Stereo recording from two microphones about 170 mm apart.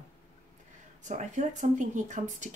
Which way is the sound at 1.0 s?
45° right (ahead or behind).